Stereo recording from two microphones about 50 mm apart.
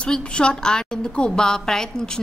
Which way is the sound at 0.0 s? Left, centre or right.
Left.